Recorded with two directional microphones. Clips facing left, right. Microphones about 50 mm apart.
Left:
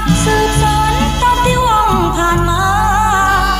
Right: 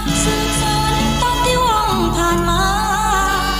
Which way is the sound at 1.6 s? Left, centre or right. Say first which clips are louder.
Left 4 dB; centre.